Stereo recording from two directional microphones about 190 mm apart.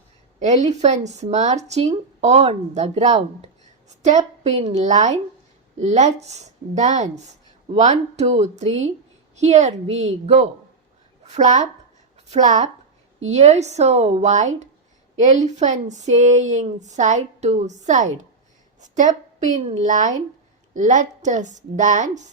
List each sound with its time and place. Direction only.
0.3 s a woman's voice: 35° right (ahead or behind)